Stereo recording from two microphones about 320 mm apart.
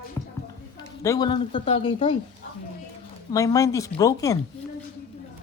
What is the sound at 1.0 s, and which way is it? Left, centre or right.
Speech, centre.